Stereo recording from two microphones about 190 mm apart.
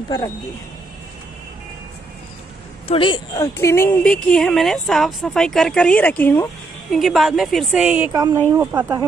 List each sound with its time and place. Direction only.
2.9 s speech: 25° left (ahead or behind)
3.5 s speech: 15° left (ahead or behind)
6.9 s speech: centre (ahead or behind)
8.1 s speech: 20° right (ahead or behind)